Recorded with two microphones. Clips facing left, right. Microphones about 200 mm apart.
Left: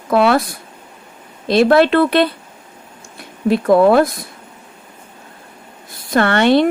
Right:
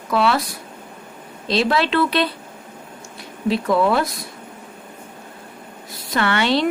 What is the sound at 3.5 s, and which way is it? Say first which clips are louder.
Speech: left 7 dB; 50° left (ahead or behind).